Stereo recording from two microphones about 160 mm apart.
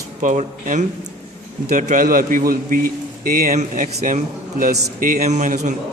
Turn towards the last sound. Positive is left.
turn(degrees=-50)  # may be behind; listen again after turning